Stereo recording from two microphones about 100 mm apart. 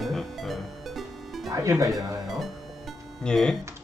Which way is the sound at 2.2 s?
Centre (ahead or behind).